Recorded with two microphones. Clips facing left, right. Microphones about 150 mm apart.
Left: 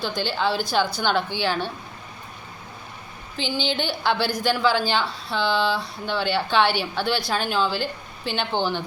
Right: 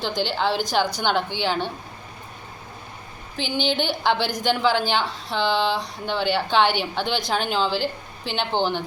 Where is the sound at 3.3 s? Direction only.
15° right (ahead or behind).